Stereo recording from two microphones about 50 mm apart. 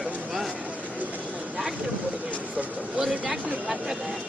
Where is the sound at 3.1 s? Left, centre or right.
Right.